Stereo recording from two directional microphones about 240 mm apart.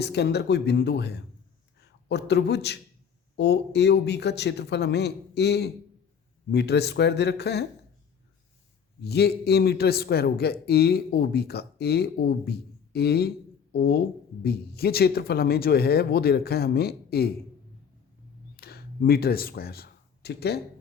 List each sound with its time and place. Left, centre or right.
0.0 s a man's voice: left
9.0 s a man's voice: left
18.5 s a sound: left